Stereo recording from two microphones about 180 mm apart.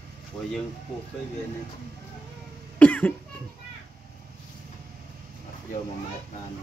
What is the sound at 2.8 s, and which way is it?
Cough, 5° left (ahead or behind).